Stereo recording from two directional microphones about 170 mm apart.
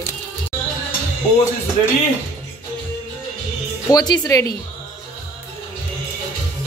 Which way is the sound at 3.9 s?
25° left (ahead or behind).